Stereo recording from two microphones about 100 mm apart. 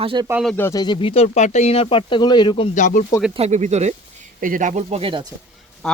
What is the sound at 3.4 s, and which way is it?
Speech, 90° right.